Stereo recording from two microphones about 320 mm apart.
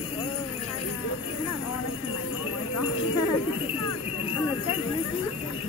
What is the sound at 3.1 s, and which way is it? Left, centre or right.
Jingle bell, left.